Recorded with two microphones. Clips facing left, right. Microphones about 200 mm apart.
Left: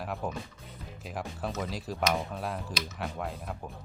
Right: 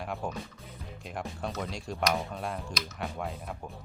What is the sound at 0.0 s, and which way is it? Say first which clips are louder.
Speech: even; centre (ahead or behind).